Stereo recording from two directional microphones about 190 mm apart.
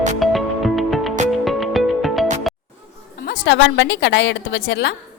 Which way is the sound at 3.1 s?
55° left (ahead or behind).